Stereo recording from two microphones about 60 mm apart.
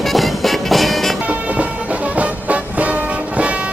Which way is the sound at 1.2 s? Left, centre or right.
Right.